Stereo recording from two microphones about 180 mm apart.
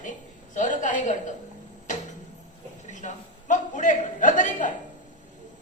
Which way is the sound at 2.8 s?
45° left (ahead or behind).